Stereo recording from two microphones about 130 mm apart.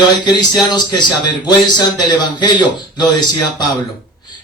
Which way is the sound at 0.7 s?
35° left (ahead or behind).